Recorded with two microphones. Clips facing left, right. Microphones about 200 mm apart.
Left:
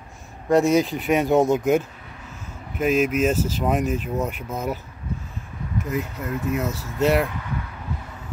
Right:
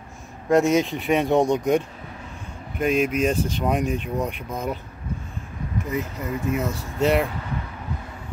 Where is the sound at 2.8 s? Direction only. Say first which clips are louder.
Left 1 dB; 5° left (ahead or behind).